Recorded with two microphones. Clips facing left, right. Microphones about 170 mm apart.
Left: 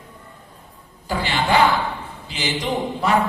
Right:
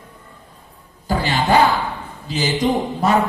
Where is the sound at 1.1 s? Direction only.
40° right (ahead or behind).